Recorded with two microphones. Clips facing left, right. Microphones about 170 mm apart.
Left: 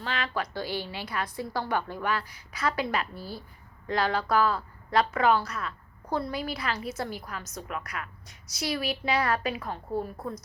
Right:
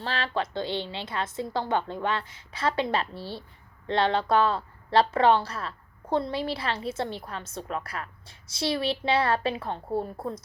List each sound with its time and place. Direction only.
0.0 s a woman's voice: 30° right (ahead or behind)